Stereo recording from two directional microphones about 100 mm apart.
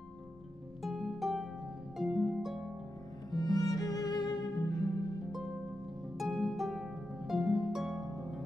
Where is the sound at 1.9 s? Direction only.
5° right (ahead or behind).